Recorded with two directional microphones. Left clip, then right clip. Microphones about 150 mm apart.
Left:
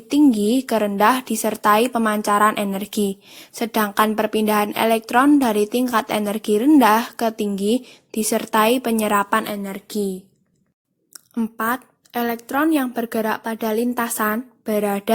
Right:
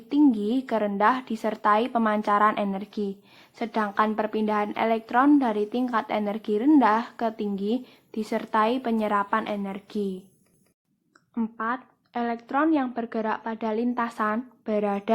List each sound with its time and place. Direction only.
0.1 s a woman's voice: 45° left (ahead or behind)
11.1 s speech: 45° left (ahead or behind)